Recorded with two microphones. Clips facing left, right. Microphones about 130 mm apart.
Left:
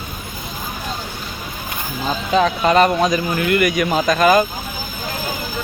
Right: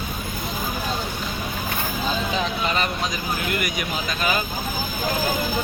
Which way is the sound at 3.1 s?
90° left.